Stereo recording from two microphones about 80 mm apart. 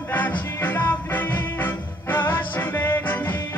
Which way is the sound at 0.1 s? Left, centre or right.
Left.